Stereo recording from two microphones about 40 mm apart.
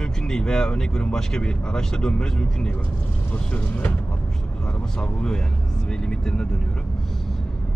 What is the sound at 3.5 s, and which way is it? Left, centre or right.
Speech, left.